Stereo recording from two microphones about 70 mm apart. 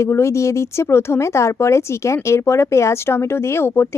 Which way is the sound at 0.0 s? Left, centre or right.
Left.